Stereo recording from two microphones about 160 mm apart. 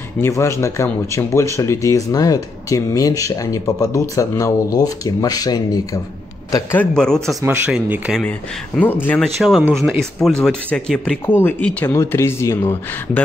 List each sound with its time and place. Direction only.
0.2 s speech: 15° left (ahead or behind)
6.5 s speech: 10° left (ahead or behind)
7.4 s speech: 10° right (ahead or behind); by 9.2 s 10° left (ahead or behind)
9.2 s speech: centre (ahead or behind); by 13.2 s 15° left (ahead or behind)